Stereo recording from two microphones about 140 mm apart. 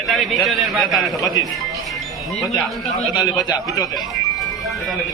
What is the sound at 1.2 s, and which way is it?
Speech, 25° left (ahead or behind).